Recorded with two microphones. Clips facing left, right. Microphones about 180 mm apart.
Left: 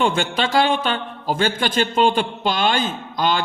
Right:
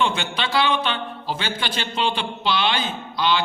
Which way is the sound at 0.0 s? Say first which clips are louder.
Left 4 dB; 45° left (ahead or behind).